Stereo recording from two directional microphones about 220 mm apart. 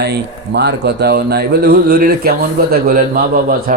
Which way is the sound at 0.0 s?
50° right (ahead or behind).